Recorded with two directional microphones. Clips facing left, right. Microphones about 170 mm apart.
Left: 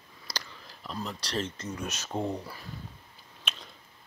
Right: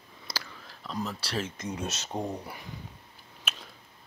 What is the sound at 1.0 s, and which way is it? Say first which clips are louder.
Speech: left 4 dB; 5° right (ahead or behind).